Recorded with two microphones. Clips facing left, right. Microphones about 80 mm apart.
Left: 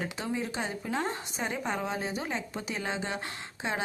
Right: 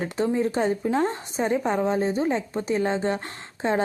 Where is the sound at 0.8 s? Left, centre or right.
Right.